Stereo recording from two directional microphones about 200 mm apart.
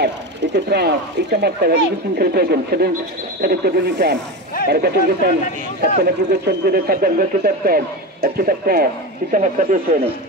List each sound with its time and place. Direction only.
0.0 s speech: 55° right (ahead or behind)
9.3 s speech: 40° right (ahead or behind)